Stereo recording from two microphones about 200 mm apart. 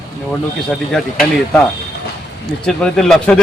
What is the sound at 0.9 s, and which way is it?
Speech, centre (ahead or behind).